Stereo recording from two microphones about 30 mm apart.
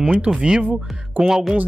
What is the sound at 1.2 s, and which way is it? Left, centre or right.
Speech, centre.